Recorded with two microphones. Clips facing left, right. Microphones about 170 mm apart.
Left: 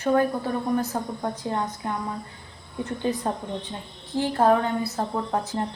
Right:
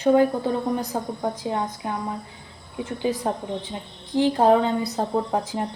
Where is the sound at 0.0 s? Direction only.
15° right (ahead or behind).